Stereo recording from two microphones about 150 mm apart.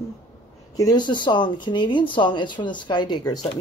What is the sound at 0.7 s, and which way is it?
Speech, 25° left (ahead or behind).